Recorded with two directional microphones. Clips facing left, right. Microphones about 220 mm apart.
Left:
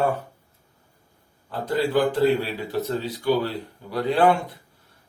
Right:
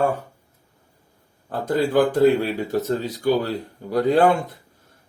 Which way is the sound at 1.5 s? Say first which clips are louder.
Right 2 dB; 45° right (ahead or behind).